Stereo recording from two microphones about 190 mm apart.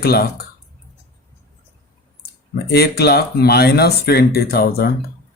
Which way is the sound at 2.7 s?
55° left (ahead or behind).